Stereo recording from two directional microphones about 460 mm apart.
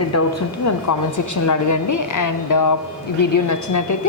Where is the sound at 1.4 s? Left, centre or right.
Left.